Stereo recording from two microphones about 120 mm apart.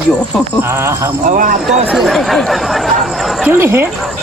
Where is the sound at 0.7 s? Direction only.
20° right (ahead or behind).